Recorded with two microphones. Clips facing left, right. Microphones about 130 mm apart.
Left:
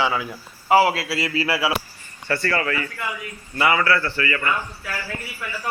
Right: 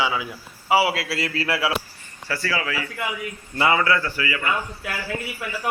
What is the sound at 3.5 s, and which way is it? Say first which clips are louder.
Speech: even; 25° right (ahead or behind).